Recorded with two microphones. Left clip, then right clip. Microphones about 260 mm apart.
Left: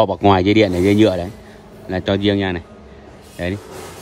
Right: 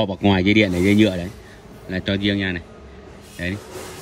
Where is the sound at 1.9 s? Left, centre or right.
Centre.